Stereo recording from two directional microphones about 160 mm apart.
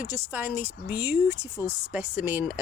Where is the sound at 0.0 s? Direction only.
10° right (ahead or behind).